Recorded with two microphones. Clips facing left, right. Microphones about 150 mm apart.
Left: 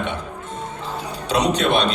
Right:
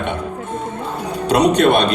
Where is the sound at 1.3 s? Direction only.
55° right (ahead or behind).